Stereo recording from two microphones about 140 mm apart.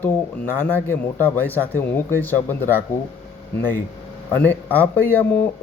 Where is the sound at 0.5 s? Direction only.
15° left (ahead or behind).